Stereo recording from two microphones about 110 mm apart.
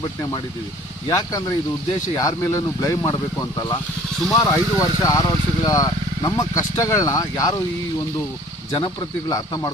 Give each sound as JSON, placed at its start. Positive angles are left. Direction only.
{"t": 1.0, "sound": "speech", "side_deg": 35}
{"t": 9.3, "sound": "speech", "side_deg": 35}